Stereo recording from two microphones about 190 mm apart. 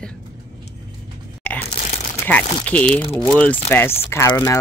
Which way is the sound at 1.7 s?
35° left (ahead or behind).